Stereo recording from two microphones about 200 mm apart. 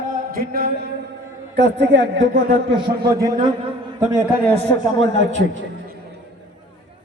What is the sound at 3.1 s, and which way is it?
Speech, 15° right (ahead or behind).